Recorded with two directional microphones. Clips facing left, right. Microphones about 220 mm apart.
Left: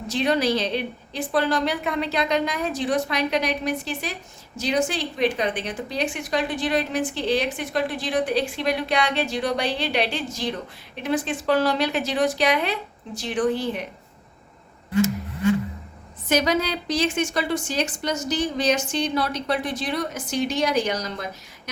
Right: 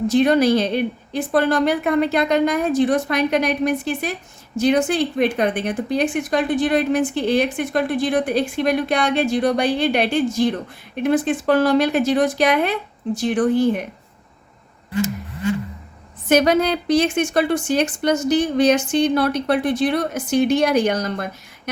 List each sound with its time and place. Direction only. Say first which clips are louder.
0.1 s a woman's voice: right 6 dB; 50° right (ahead or behind)
16.3 s a woman's voice: right 6 dB; 55° right (ahead or behind)